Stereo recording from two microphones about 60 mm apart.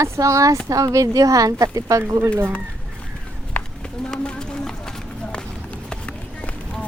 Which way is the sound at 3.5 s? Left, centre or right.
Left.